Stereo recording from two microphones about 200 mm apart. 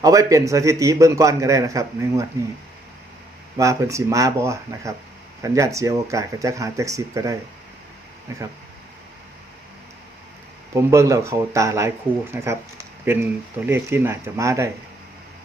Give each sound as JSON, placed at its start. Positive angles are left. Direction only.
{"t": 0.0, "sound": "a man's voice", "side_deg": -15}
{"t": 3.6, "sound": "a man's voice", "side_deg": -15}
{"t": 10.8, "sound": "a man's voice", "side_deg": -15}